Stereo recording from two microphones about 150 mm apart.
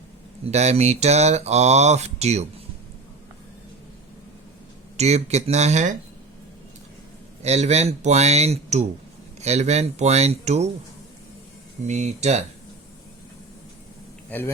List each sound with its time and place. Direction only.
0.4 s mantra: 45° right (ahead or behind)
4.9 s mantra: 45° right (ahead or behind)
7.4 s mantra: 45° right (ahead or behind)
11.9 s mantra: 50° right (ahead or behind)
14.3 s a man's voice: 15° left (ahead or behind)